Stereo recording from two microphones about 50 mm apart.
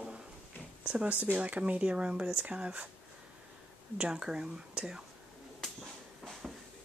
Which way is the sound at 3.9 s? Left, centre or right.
Centre.